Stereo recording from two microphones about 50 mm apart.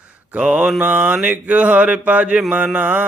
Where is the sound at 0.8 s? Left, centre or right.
Right.